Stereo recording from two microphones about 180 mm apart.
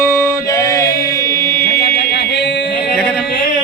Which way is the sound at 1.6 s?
60° left (ahead or behind).